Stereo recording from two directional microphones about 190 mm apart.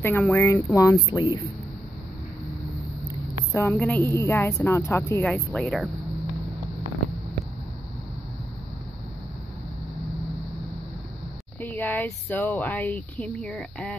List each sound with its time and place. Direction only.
0.2 s speech: 10° left (ahead or behind)
3.5 s speech: 10° left (ahead or behind)
11.6 s speech: 10° left (ahead or behind)